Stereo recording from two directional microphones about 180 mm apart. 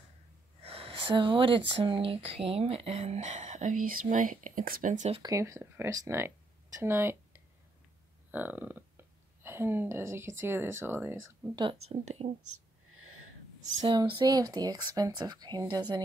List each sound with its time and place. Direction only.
0.6 s speech: 35° right (ahead or behind)
5.2 s speech: 15° right (ahead or behind)
11.5 s speech: 25° right (ahead or behind)
13.7 s speech: 25° right (ahead or behind)